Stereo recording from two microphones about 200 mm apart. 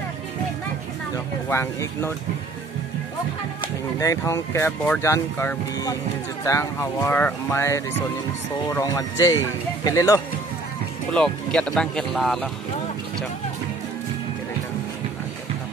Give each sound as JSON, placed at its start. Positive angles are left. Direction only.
{"t": 1.1, "sound": "speech", "side_deg": 15}
{"t": 4.0, "sound": "speech", "side_deg": 15}
{"t": 11.1, "sound": "speech", "side_deg": 5}